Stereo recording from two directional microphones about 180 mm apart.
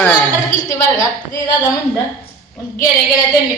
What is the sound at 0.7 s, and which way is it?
Speech, 20° left (ahead or behind).